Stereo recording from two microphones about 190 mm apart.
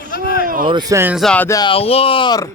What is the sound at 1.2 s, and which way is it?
Speech, 5° left (ahead or behind).